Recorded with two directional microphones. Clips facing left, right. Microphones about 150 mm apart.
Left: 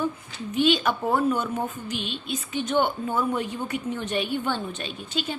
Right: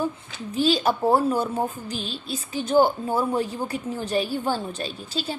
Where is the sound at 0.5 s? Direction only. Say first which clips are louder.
Right 1 dB; 35° right (ahead or behind).